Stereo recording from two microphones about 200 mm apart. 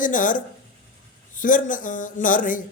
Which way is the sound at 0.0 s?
40° left (ahead or behind).